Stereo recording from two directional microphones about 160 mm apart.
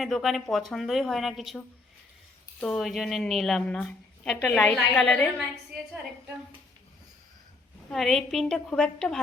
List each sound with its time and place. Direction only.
0.0 s a woman's voice: centre (ahead or behind)
7.9 s a woman's voice: centre (ahead or behind)